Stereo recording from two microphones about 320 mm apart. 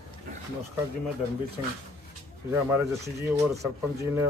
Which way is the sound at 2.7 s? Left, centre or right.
Centre.